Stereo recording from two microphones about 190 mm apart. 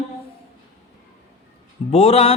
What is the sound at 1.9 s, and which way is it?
Speech, 35° left (ahead or behind).